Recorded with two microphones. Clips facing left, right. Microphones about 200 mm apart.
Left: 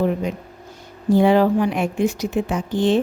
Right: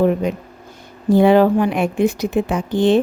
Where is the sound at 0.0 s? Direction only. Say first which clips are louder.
Right 4 dB; 65° right (ahead or behind).